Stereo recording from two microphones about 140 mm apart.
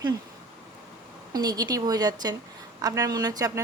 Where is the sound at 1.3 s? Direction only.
30° right (ahead or behind).